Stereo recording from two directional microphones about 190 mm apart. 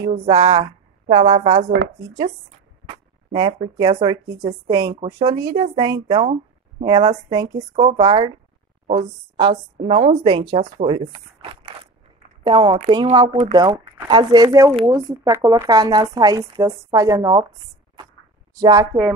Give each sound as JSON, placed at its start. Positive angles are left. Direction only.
{"t": 0.3, "sound": "a woman's voice", "side_deg": -20}
{"t": 2.9, "sound": "speech", "side_deg": -25}
{"t": 9.4, "sound": "speech", "side_deg": -25}
{"t": 13.1, "sound": "speech", "side_deg": -20}
{"t": 18.5, "sound": "speech", "side_deg": -20}